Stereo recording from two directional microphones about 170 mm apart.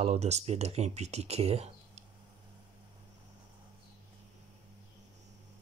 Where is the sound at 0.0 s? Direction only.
40° right (ahead or behind).